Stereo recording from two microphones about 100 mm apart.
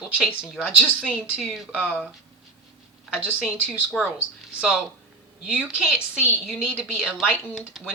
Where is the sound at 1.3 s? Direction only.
Centre (ahead or behind).